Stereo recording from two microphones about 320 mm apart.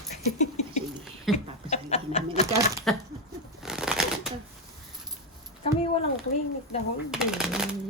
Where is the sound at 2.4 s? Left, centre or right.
Centre.